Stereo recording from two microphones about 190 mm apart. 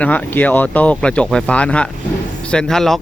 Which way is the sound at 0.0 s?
10° left (ahead or behind).